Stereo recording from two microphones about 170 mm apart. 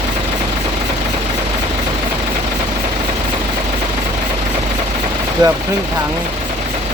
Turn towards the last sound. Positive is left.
turn(degrees=-25)  # may be behind; listen again after turning